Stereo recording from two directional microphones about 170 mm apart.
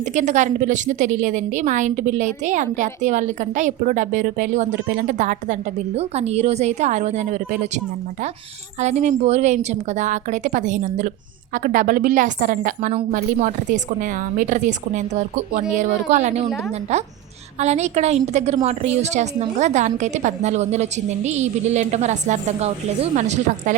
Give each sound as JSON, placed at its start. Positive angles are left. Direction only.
{"t": 0.0, "sound": "a woman's voice", "side_deg": -45}
{"t": 8.8, "sound": "a woman's voice", "side_deg": -40}
{"t": 17.6, "sound": "a woman's voice", "side_deg": -40}